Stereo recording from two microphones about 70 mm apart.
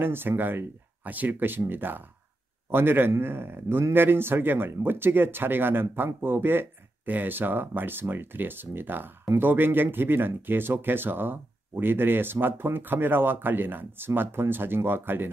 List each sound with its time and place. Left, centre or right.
0.0 s a man's voice: right